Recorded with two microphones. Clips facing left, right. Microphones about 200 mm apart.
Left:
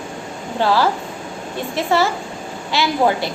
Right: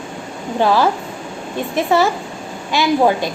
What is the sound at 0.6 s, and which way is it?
A child's voice, 15° right (ahead or behind).